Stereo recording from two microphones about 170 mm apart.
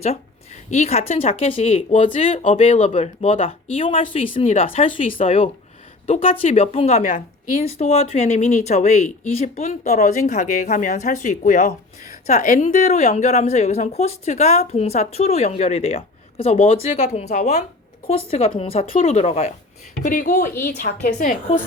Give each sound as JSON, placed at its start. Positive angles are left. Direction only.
{"t": 0.0, "sound": "a woman's voice", "side_deg": 40}
{"t": 20.0, "sound": "speech", "side_deg": 55}